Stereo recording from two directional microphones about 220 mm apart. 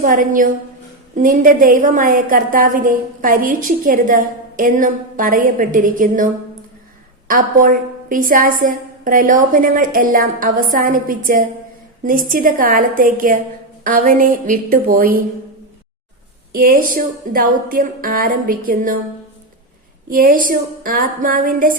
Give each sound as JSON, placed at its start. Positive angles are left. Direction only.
{"t": 0.0, "sound": "a woman's voice", "side_deg": -35}
{"t": 16.5, "sound": "a woman's voice", "side_deg": -40}
{"t": 20.1, "sound": "a woman's voice", "side_deg": -40}